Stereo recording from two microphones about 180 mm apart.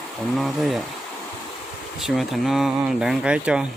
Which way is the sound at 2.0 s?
Centre (ahead or behind).